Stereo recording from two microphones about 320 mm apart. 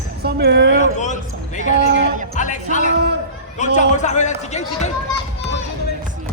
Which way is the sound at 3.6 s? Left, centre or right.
Left.